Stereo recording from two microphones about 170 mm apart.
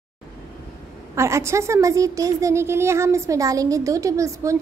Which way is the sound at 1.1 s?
15° right (ahead or behind).